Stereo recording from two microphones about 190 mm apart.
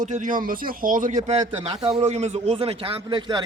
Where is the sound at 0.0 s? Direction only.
45° right (ahead or behind).